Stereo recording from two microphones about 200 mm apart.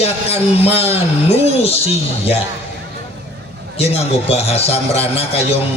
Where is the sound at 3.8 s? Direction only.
30° left (ahead or behind).